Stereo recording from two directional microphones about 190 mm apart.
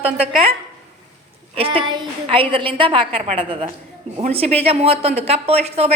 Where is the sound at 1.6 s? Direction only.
30° right (ahead or behind).